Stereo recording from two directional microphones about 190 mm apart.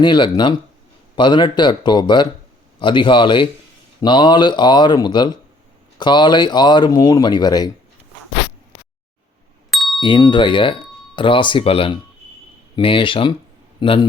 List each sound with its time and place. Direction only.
0.0 s speech: 25° left (ahead or behind)
9.6 s ding: centre (ahead or behind)
10.0 s a man's voice: 25° left (ahead or behind)